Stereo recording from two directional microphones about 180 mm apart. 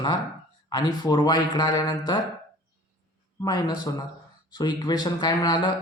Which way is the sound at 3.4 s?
20° left (ahead or behind).